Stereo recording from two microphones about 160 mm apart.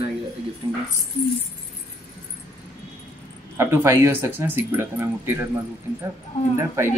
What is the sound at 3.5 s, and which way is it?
Speech, 15° right (ahead or behind).